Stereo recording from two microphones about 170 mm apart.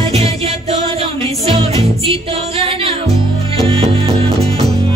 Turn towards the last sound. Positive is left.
turn(degrees=-35)  # may be behind; listen again after turning